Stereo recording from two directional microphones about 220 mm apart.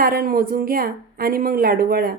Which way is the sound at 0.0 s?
40° right (ahead or behind).